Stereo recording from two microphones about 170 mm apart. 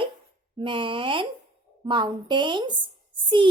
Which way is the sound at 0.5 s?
30° right (ahead or behind).